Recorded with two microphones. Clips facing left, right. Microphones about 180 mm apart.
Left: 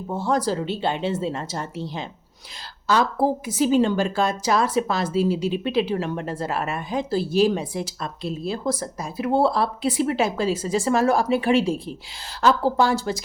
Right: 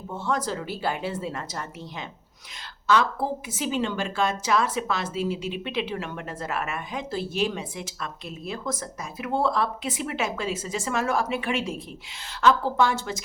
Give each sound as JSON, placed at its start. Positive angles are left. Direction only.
{"t": 0.1, "sound": "a woman's voice", "side_deg": 35}